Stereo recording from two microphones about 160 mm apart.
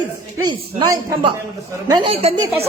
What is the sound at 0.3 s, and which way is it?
Speech, 25° right (ahead or behind).